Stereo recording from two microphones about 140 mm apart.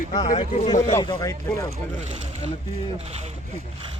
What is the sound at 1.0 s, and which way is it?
Speech, 25° left (ahead or behind).